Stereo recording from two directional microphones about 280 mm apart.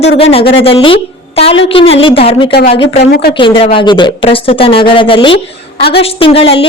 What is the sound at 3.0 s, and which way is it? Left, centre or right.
Speech, left.